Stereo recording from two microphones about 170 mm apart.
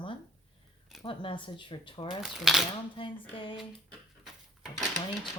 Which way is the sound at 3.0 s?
30° left (ahead or behind).